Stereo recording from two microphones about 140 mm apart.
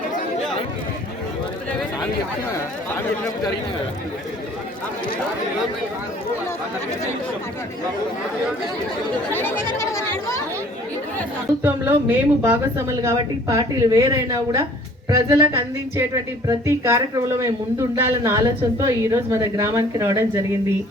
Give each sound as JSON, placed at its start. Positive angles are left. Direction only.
{"t": 9.3, "sound": "chatter", "side_deg": 15}
{"t": 11.6, "sound": "speech", "side_deg": -15}